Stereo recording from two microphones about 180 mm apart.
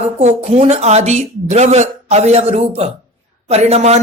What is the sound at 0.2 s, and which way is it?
A woman's voice, 40° right (ahead or behind).